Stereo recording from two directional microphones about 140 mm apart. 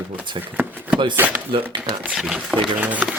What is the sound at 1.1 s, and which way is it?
Speech, 10° right (ahead or behind).